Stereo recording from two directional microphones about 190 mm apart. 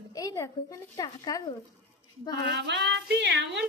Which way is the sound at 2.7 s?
70° right (ahead or behind).